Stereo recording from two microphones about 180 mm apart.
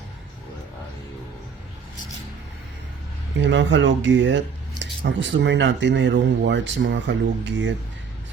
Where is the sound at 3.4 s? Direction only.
85° right.